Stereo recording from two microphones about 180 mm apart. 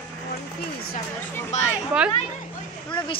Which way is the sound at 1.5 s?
40° left (ahead or behind).